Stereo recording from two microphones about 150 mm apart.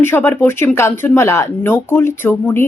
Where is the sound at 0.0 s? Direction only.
15° left (ahead or behind).